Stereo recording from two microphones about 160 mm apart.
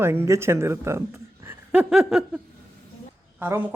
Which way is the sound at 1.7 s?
5° right (ahead or behind).